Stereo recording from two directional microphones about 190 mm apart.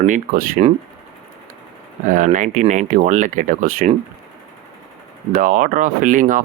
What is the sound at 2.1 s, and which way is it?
Speech, 40° right (ahead or behind).